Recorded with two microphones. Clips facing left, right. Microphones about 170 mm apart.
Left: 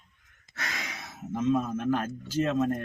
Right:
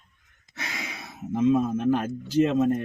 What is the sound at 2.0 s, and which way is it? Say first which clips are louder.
Speech: right 6 dB; 15° right (ahead or behind).